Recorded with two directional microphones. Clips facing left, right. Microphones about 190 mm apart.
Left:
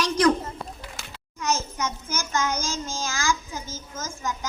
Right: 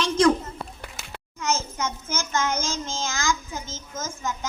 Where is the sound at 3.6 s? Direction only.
10° left (ahead or behind).